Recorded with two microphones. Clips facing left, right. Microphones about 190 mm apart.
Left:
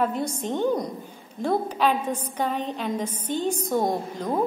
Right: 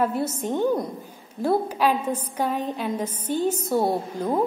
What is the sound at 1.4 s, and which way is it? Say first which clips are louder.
A woman's voice: right 1 dB; 10° right (ahead or behind).